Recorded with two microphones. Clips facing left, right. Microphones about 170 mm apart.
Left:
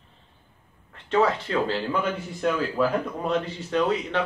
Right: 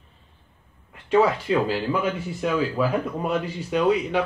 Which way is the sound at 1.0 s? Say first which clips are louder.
Right 3 dB; 10° right (ahead or behind).